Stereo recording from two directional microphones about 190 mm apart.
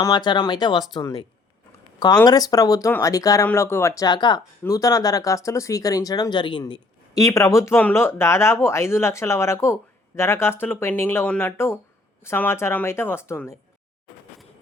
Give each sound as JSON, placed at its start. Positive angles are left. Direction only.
{"t": 0.0, "sound": "speech", "side_deg": 20}
{"t": 2.2, "sound": "speech", "side_deg": 20}